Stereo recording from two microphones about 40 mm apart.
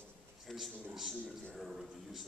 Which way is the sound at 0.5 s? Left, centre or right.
Centre.